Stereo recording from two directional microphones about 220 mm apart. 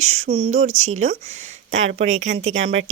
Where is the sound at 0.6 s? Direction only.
70° right (ahead or behind).